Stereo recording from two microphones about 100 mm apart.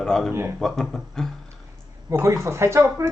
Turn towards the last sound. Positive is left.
turn(degrees=-30)  # may be behind; listen again after turning